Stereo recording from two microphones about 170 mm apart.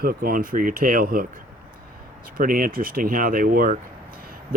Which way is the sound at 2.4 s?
55° right (ahead or behind).